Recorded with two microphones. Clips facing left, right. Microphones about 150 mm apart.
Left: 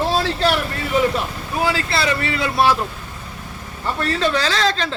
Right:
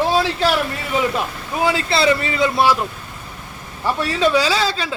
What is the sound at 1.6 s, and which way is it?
Speech, 20° right (ahead or behind).